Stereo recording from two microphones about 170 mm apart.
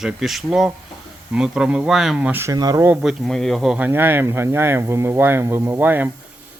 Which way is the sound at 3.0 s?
Centre (ahead or behind).